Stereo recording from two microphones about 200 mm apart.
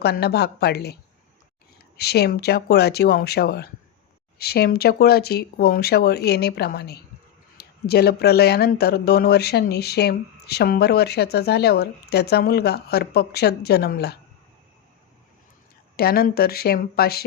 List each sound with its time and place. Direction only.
0.0 s speech: 55° left (ahead or behind)
2.0 s speech: 55° left (ahead or behind)
16.0 s speech: 50° left (ahead or behind)